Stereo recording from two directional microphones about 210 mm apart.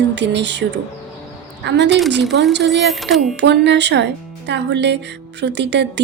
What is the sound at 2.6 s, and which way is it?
Speech, centre (ahead or behind).